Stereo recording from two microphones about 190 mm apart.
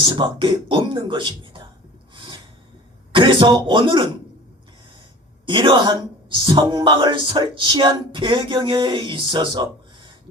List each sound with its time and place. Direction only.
0.0 s speech: 25° right (ahead or behind)
2.1 s a sound: 25° right (ahead or behind)
3.1 s speech: 25° right (ahead or behind)
5.5 s speech: 25° right (ahead or behind)